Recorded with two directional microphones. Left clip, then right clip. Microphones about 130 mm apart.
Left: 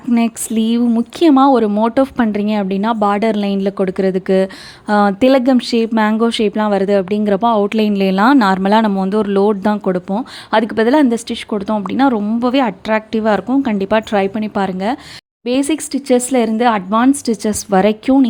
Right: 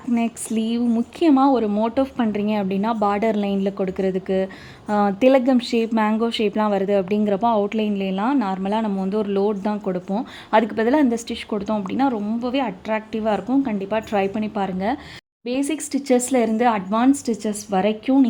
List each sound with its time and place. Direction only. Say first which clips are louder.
0.5 s a woman's voice: left 7 dB; 40° left (ahead or behind)
7.8 s speech: left 10 dB; 50° left (ahead or behind)
8.9 s a woman's voice: left 7 dB; 45° left (ahead or behind)
14.1 s a woman's voice: left 6 dB; 30° left (ahead or behind)
15.9 s a woman's voice: left 3 dB; 25° left (ahead or behind)
17.5 s a woman's voice: left 8 dB; 40° left (ahead or behind)